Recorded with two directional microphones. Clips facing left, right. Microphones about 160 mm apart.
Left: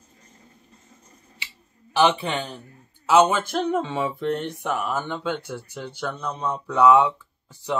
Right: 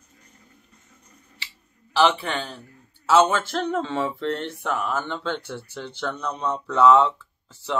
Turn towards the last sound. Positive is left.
turn(degrees=15)  # may be behind; listen again after turning